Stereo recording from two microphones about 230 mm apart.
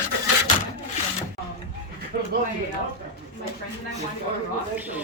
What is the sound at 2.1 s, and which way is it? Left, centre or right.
Speech, right.